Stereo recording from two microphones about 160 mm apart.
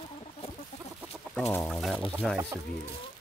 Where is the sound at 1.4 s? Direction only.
15° left (ahead or behind).